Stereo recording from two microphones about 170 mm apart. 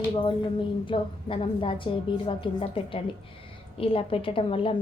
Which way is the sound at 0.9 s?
30° left (ahead or behind).